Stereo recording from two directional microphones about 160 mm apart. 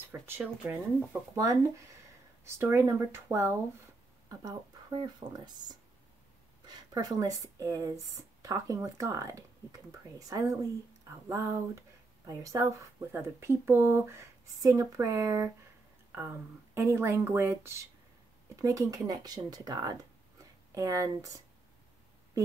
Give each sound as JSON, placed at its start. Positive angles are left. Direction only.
{"t": 0.1, "sound": "speech", "side_deg": -10}
{"t": 16.7, "sound": "speech", "side_deg": -15}